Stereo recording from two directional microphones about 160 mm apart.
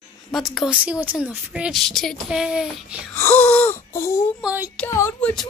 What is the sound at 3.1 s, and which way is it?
Wail, 10° left (ahead or behind).